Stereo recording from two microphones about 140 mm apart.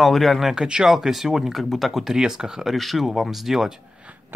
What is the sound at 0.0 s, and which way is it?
Speech, centre (ahead or behind).